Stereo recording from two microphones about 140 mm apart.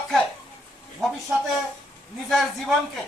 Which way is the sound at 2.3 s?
Centre (ahead or behind).